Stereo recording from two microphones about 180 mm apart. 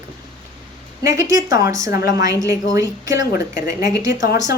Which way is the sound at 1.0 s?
15° right (ahead or behind).